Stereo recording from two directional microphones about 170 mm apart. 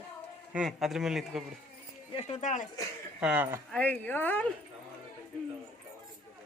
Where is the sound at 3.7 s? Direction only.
10° left (ahead or behind).